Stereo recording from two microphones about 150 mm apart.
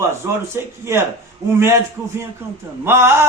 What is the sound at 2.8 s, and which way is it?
Speech, 15° right (ahead or behind).